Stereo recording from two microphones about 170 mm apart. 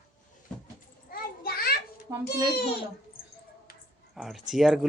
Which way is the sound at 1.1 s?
65° left (ahead or behind).